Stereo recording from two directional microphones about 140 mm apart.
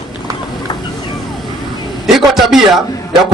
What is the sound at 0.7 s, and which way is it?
Vehicle, 30° left (ahead or behind).